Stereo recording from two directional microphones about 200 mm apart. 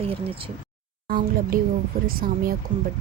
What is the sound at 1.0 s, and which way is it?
Speech, 45° right (ahead or behind).